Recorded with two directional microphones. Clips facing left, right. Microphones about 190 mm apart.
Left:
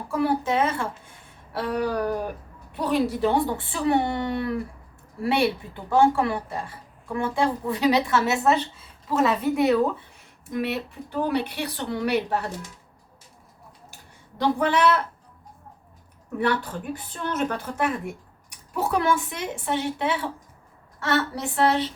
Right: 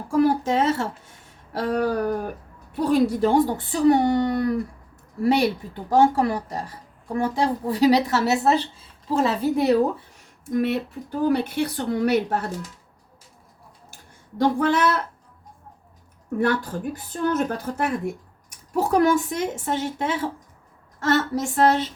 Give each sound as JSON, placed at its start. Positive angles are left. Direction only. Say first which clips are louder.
{"t": 0.1, "sound": "a woman's voice", "louder": "right 4 dB", "side_deg": -40}
{"t": 10.5, "sound": "a woman's voice", "louder": "right 5 dB", "side_deg": -45}
{"t": 14.3, "sound": "speech", "louder": "right 2 dB", "side_deg": -40}
{"t": 16.4, "sound": "a woman's voice", "louder": "right 2 dB", "side_deg": -45}